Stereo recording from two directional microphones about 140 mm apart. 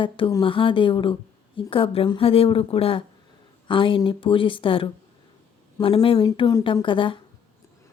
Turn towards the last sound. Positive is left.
turn(degrees=35)  # may be behind; listen again after turning